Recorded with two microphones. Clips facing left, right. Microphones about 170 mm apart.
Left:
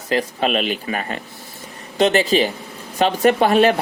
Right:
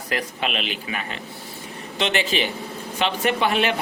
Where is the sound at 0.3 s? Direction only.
40° left (ahead or behind).